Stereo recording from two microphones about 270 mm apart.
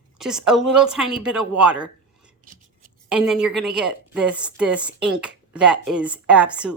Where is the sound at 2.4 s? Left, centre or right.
Right.